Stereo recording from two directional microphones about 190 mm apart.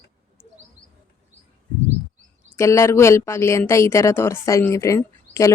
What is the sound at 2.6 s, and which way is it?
A woman's voice, 15° left (ahead or behind).